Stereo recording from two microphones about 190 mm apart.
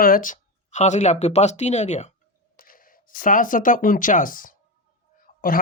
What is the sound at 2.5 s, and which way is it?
Speech, 50° left (ahead or behind).